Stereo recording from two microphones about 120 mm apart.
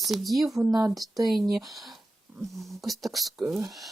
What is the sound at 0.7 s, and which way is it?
Speech, 30° right (ahead or behind).